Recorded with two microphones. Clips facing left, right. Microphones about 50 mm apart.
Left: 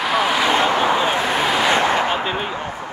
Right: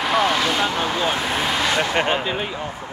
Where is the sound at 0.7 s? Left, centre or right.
Left.